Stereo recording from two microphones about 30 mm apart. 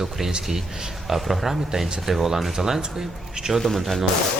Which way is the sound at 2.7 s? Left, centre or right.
Right.